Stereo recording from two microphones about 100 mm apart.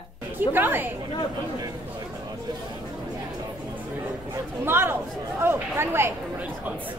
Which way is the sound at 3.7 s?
15° right (ahead or behind).